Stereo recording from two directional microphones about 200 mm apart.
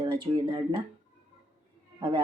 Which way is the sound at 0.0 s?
25° right (ahead or behind).